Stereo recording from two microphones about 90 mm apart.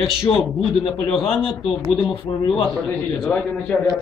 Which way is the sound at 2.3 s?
55° left (ahead or behind).